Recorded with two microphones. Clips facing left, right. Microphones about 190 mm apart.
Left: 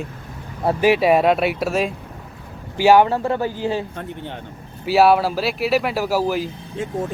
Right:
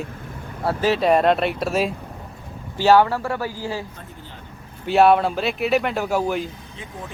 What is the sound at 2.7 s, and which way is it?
Speech, 15° left (ahead or behind).